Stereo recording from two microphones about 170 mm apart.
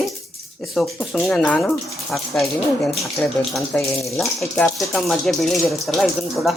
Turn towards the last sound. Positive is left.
turn(degrees=0)  # may be behind; listen again after turning